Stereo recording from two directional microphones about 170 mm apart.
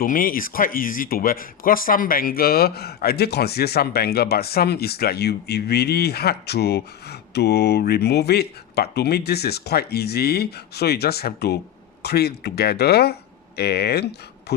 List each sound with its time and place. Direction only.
0.0 s speech: 55° left (ahead or behind)